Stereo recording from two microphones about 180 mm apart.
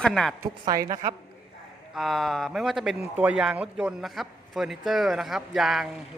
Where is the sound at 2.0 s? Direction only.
Centre (ahead or behind).